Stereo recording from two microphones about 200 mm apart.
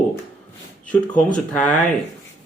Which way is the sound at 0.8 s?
5° left (ahead or behind).